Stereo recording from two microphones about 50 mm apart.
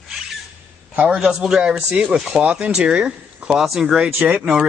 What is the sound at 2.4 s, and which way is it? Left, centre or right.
A man's voice, right.